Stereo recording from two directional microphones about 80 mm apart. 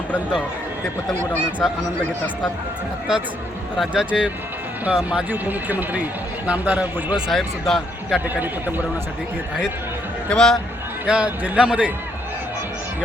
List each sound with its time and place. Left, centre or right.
1.6 s speech: centre
3.8 s a man's voice: centre
5.3 s a man's voice: right
7.3 s speech: centre
8.3 s speech: right
10.2 s a man's voice: centre
11.0 s a man's voice: centre